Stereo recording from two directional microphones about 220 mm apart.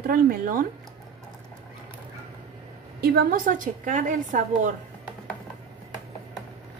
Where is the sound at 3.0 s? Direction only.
45° right (ahead or behind).